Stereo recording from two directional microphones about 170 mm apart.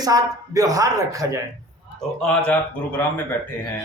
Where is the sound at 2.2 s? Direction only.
10° left (ahead or behind).